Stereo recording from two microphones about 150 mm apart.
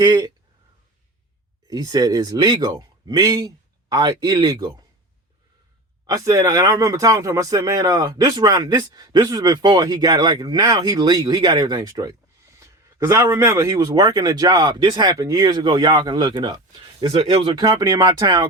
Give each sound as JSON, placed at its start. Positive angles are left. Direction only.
{"t": 0.0, "sound": "speech", "side_deg": -25}
{"t": 1.6, "sound": "speech", "side_deg": -25}
{"t": 6.1, "sound": "speech", "side_deg": -25}
{"t": 17.1, "sound": "speech", "side_deg": -45}
{"t": 17.5, "sound": "speech", "side_deg": -25}